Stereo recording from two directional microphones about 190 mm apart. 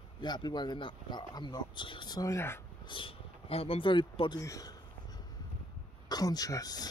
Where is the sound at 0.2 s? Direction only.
25° left (ahead or behind).